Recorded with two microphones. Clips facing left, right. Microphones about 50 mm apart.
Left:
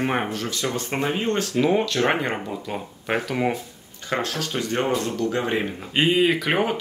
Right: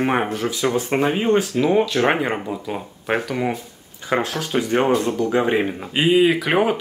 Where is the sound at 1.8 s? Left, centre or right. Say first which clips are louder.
Right 3 dB; centre.